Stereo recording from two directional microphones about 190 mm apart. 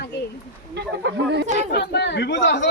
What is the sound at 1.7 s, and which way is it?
A woman's voice, 65° left (ahead or behind).